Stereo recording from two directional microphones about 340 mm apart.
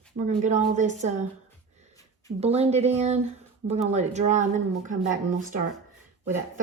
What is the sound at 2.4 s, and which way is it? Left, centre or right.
Speech, centre.